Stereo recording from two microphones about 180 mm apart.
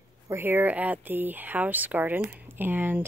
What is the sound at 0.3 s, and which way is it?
Speech, 10° right (ahead or behind).